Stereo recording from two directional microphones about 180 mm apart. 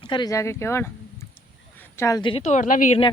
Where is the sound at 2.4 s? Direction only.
45° left (ahead or behind).